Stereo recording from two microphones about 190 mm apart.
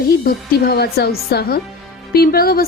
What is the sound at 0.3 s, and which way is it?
A woman's voice, 55° left (ahead or behind).